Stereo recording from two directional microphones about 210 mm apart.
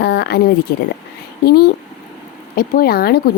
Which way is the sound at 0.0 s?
50° left (ahead or behind).